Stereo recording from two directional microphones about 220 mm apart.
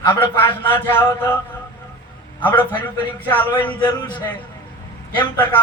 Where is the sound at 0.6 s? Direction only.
10° left (ahead or behind).